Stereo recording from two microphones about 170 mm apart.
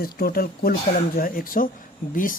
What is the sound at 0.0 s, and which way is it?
Speech, 65° left (ahead or behind).